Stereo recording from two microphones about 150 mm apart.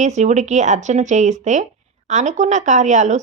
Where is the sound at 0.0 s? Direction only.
50° right (ahead or behind).